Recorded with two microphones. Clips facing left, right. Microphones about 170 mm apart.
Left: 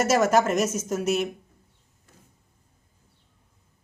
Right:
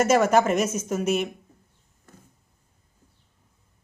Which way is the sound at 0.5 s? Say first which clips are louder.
Right 1 dB; 45° left (ahead or behind).